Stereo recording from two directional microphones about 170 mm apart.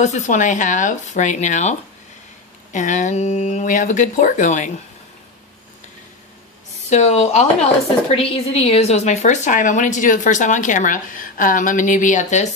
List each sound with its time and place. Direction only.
0.0 s a woman's voice: 45° left (ahead or behind)
6.9 s a woman's voice: 40° left (ahead or behind)